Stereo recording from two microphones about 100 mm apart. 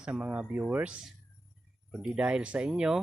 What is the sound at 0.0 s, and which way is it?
Speech, 10° right (ahead or behind).